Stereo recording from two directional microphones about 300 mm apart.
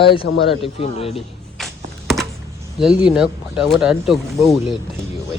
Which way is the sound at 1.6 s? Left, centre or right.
Centre.